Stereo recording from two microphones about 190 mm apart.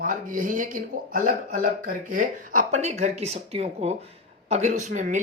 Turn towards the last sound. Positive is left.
turn(degrees=-40)  # may be behind; listen again after turning